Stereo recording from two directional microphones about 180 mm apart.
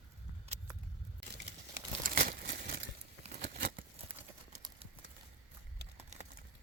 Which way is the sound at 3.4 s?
75° right (ahead or behind).